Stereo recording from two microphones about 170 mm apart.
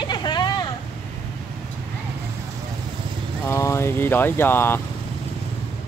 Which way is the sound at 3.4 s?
15° left (ahead or behind).